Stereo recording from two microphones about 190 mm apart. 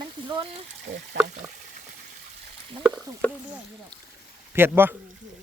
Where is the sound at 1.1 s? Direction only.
65° right (ahead or behind).